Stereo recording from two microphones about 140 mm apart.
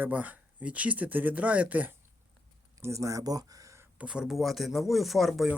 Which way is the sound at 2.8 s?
20° right (ahead or behind).